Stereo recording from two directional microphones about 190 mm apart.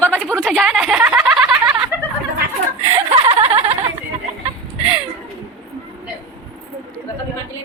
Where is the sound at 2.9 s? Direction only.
30° right (ahead or behind).